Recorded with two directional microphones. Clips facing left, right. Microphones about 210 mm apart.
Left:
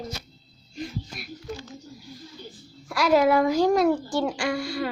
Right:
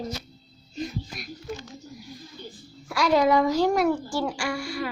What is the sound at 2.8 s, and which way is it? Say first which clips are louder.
A child's voice: left 1 dB; centre (ahead or behind).